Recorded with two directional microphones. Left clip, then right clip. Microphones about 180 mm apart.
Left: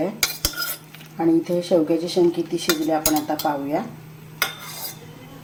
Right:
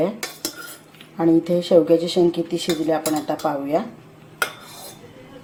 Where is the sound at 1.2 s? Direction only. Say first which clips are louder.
Right 2 dB; 15° right (ahead or behind).